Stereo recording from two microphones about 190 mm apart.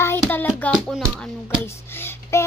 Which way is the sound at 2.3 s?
15° left (ahead or behind).